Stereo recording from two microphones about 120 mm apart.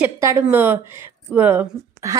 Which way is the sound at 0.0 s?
20° right (ahead or behind).